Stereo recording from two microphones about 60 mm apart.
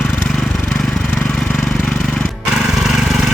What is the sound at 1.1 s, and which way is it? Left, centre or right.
Vehicle, left.